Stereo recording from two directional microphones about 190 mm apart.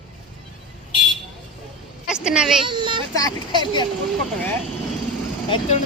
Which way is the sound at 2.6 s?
25° right (ahead or behind).